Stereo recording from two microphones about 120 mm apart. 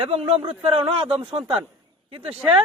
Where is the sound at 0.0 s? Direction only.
55° right (ahead or behind).